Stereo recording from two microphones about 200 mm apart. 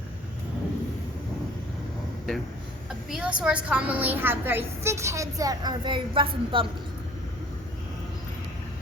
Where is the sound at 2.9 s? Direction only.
Centre (ahead or behind); by 6.6 s 25° right (ahead or behind).